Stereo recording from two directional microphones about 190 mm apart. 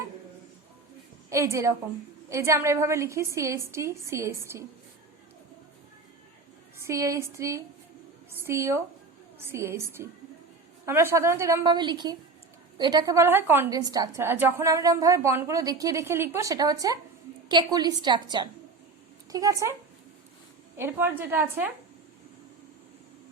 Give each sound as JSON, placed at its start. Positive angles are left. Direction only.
{"t": 1.3, "sound": "a woman's voice", "side_deg": -15}
{"t": 6.7, "sound": "a woman's voice", "side_deg": -15}
{"t": 20.7, "sound": "a woman's voice", "side_deg": -10}